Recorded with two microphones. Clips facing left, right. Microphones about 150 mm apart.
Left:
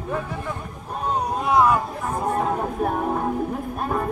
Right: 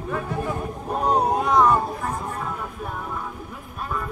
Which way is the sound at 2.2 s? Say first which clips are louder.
Left 8 dB; 45° left (ahead or behind).